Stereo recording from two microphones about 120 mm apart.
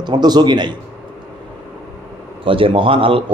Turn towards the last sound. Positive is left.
turn(degrees=-50)  # may be behind; listen again after turning